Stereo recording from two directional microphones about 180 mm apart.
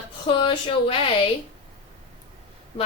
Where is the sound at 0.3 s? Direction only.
30° left (ahead or behind).